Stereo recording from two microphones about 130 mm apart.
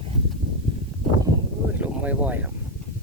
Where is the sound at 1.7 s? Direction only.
10° right (ahead or behind).